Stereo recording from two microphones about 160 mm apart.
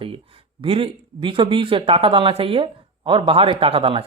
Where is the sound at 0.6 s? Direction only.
35° right (ahead or behind).